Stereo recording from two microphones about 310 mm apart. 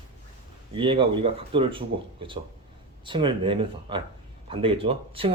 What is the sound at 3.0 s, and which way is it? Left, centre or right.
Speech, centre.